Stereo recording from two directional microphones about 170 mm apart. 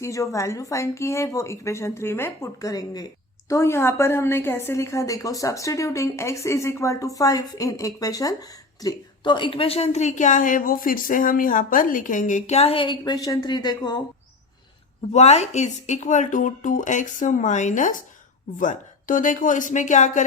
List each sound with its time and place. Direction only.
0.0 s a woman's voice: 20° left (ahead or behind)
15.1 s speech: 40° left (ahead or behind)